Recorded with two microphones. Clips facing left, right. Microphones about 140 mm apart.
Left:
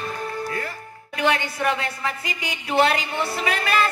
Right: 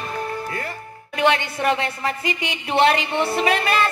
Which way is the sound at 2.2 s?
25° right (ahead or behind).